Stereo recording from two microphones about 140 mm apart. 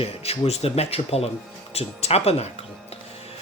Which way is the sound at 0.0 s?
45° left (ahead or behind).